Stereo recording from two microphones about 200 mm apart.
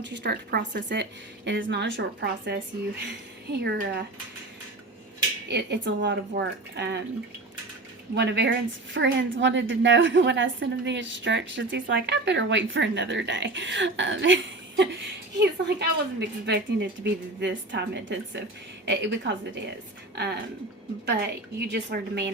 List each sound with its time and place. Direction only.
0.0 s a woman's voice: 60° right (ahead or behind)
5.5 s a woman's voice: 60° right (ahead or behind)
8.1 s a woman's voice: 60° right (ahead or behind)